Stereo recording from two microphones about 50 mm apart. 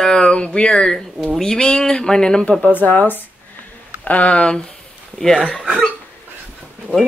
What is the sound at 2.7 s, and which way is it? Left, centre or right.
Speech, left.